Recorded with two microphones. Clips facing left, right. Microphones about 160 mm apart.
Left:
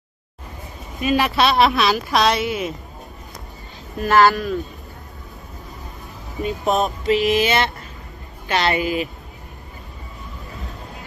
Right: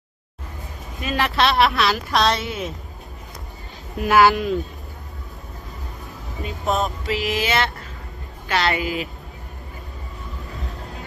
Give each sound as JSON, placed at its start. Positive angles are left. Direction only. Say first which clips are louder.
{"t": 1.0, "sound": "speech", "louder": "left 3 dB", "side_deg": 15}
{"t": 2.2, "sound": "a woman's voice", "louder": "left 3 dB", "side_deg": 0}
{"t": 4.0, "sound": "speech", "louder": "even", "side_deg": -15}
{"t": 6.4, "sound": "speech", "louder": "left 3 dB", "side_deg": 20}